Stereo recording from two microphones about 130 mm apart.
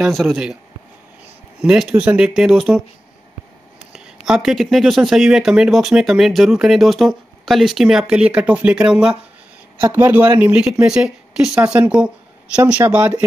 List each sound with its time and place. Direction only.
0.0 s speech: centre (ahead or behind)
1.6 s speech: 10° right (ahead or behind)
3.9 s speech: 5° right (ahead or behind)